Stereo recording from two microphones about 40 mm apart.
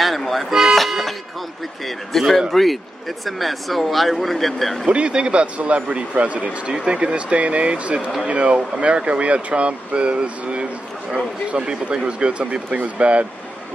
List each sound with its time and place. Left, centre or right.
0.0 s vehicle: centre
0.5 s vehicle: centre
0.7 s music: centre
1.9 s speech: centre
4.8 s speech: right